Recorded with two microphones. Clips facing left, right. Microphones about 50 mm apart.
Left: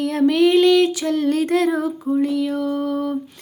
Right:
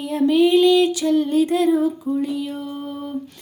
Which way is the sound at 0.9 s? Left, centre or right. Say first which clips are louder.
Right 2 dB; left.